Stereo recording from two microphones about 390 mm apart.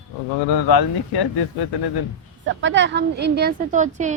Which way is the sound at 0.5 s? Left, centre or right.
Left.